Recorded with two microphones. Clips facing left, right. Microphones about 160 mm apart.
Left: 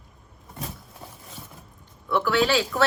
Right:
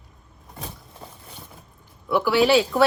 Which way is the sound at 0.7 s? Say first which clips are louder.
Even; centre (ahead or behind).